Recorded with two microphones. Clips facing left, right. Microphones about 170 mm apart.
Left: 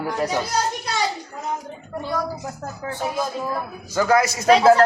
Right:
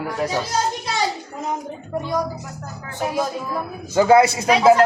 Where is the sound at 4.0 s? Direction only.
25° right (ahead or behind).